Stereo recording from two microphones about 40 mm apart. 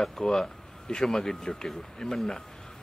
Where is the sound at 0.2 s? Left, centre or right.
Centre.